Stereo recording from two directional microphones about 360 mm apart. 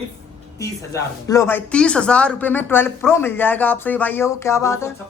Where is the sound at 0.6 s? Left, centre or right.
Centre.